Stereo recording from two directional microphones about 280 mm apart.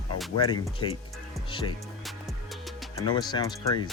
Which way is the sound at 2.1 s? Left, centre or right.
Centre.